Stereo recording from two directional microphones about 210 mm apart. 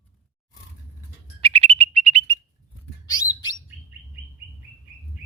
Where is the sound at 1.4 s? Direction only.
25° right (ahead or behind).